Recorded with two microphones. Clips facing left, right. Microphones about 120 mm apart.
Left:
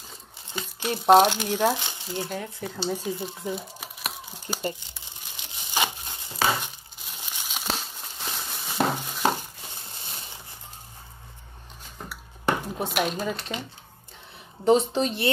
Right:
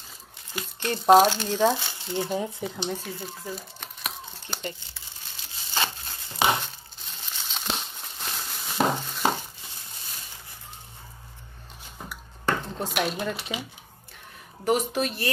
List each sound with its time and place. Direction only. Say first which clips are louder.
0.7 s speech: even; 5° left (ahead or behind)
1.3 s speech: right 1 dB; 15° left (ahead or behind)
2.1 s speech: right 5 dB; 15° right (ahead or behind)
2.9 s speech: left 4 dB; 15° left (ahead or behind)
3.8 s a sound: left 1 dB; 5° left (ahead or behind)
4.9 s tearing: left 1 dB; 20° left (ahead or behind)
6.6 s crumpling: left 1 dB; 10° left (ahead or behind)
9.0 s a sound: left 1 dB; 10° left (ahead or behind)
10.0 s music: left 3 dB; 30° left (ahead or behind)
12.4 s dishes: left 1 dB; 15° left (ahead or behind)
12.8 s speech: left 1 dB; centre (ahead or behind)
14.6 s a woman's voice: left 4 dB; 25° left (ahead or behind)